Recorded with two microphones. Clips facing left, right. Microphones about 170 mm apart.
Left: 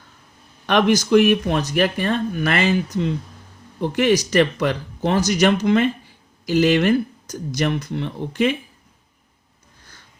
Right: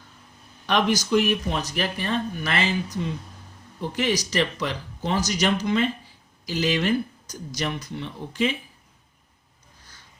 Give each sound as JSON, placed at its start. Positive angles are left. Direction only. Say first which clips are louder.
{"t": 0.7, "sound": "speech", "louder": "left 6 dB", "side_deg": 60}
{"t": 3.8, "sound": "speech", "louder": "left 7 dB", "side_deg": 55}